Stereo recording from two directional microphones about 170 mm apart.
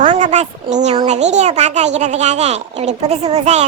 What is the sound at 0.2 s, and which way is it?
A child's voice, 45° right (ahead or behind).